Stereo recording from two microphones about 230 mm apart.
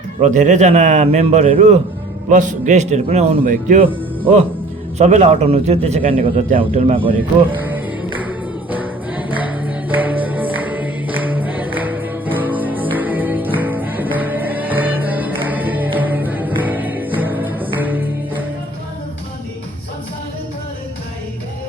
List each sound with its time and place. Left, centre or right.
0.2 s a man's voice: right
4.9 s a man's voice: right
8.7 s music: centre